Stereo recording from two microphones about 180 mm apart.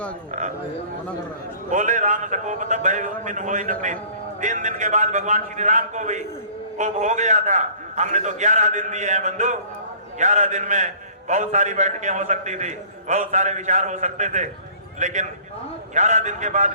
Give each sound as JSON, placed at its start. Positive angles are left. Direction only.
{"t": 1.7, "sound": "a man's voice", "side_deg": -45}